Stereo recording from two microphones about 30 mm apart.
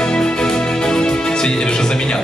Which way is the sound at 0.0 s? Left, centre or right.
Left.